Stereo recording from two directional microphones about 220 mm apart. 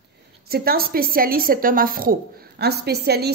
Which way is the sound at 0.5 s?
45° right (ahead or behind).